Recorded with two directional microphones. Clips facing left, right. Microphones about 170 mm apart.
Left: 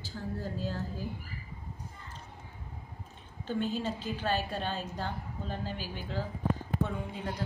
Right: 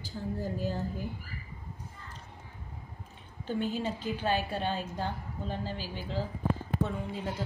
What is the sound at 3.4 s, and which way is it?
A woman's voice, 10° right (ahead or behind).